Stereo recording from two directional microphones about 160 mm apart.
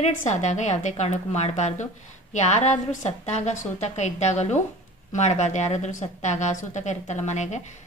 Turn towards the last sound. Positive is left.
turn(degrees=45)  # may be behind; listen again after turning